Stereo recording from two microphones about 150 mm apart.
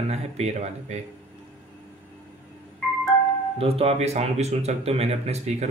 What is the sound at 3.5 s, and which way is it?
Speech, 40° right (ahead or behind).